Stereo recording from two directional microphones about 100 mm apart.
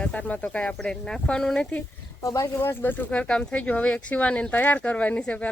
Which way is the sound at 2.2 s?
30° left (ahead or behind).